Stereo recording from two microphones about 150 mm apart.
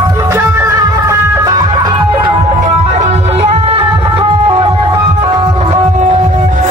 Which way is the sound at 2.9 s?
45° right (ahead or behind).